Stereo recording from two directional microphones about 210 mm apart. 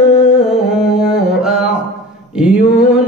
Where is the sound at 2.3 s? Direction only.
5° right (ahead or behind).